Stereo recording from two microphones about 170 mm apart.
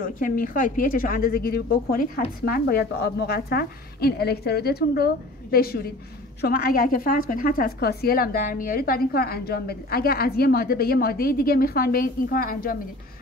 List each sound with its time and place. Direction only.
0.0 s a woman's voice: 55° left (ahead or behind)